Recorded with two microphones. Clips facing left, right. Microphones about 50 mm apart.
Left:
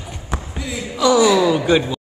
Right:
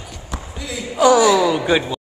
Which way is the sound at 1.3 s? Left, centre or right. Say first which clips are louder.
Left 1 dB; centre.